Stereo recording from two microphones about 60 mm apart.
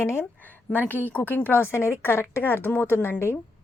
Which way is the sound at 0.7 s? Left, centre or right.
Left.